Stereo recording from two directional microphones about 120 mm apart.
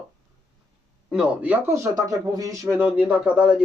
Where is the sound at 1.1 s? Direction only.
5° right (ahead or behind); by 2.7 s 25° right (ahead or behind).